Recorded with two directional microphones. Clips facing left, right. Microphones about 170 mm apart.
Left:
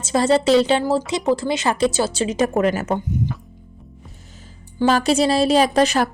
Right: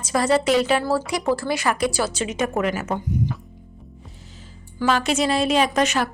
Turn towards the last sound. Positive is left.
turn(degrees=35)  # may be behind; listen again after turning